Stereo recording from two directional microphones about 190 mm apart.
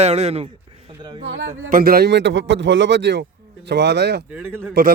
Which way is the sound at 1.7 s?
50° right (ahead or behind).